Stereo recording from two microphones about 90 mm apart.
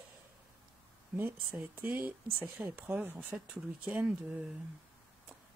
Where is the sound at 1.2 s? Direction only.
20° right (ahead or behind).